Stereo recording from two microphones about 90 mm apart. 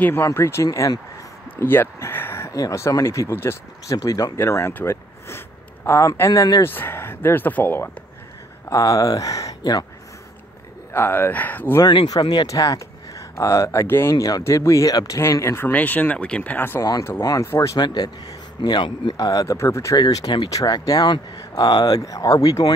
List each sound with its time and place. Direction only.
0.0 s speech: 30° left (ahead or behind)
3.9 s speech: 40° left (ahead or behind)
6.6 s speech: 25° left (ahead or behind)
8.6 s speech: 40° left (ahead or behind)
10.9 s speech: 25° left (ahead or behind)
11.8 s speech: 55° left (ahead or behind); by 14.1 s 25° left (ahead or behind)
14.1 s speech: 45° left (ahead or behind)
14.4 s speech: 30° left (ahead or behind)
17.2 s speech: 40° left (ahead or behind)
17.7 s speech: 50° left (ahead or behind); by 20.0 s 30° left (ahead or behind)
20.0 s speech: 45° left (ahead or behind)